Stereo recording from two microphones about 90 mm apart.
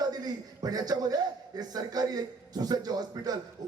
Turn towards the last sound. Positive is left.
turn(degrees=-45)  # may be behind; listen again after turning